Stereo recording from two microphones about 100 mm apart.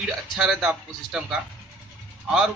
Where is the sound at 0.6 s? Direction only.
10° right (ahead or behind).